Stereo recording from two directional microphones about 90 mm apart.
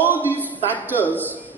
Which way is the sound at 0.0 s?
20° right (ahead or behind).